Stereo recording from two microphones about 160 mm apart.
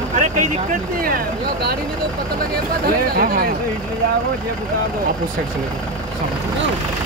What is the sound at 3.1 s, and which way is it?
Speech, 65° right (ahead or behind).